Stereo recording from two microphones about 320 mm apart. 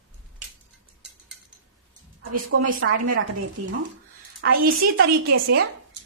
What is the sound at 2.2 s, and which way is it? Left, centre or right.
A woman's voice, right.